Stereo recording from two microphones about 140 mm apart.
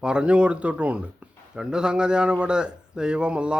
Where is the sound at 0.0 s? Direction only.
5° right (ahead or behind).